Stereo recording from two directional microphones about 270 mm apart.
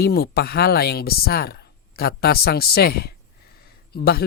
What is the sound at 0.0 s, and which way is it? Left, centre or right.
Speech, left.